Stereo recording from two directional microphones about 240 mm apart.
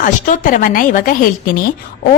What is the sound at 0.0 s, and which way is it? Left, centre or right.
A woman's voice, left.